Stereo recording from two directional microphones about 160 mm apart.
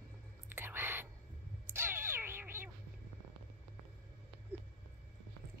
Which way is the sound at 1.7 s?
15° right (ahead or behind).